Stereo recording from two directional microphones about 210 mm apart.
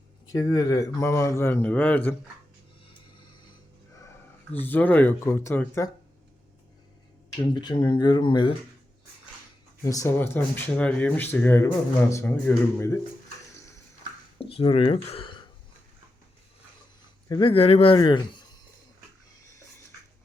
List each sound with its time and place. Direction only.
0.3 s speech: 15° left (ahead or behind)
4.5 s speech: 10° left (ahead or behind)
7.4 s speech: 20° left (ahead or behind)
9.8 s speech: 15° left (ahead or behind)
14.5 s speech: 25° left (ahead or behind)
17.2 s speech: 20° left (ahead or behind)